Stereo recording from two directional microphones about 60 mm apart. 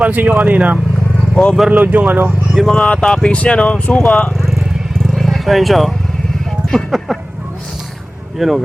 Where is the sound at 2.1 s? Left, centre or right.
Right.